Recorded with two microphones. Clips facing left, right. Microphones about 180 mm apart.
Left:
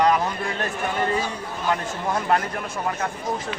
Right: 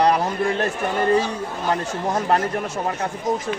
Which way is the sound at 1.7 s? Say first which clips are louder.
Right 1 dB; 40° right (ahead or behind).